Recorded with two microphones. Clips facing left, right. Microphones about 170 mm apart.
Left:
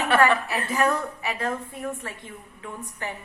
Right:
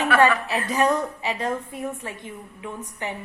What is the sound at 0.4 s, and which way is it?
A woman's voice, 20° right (ahead or behind).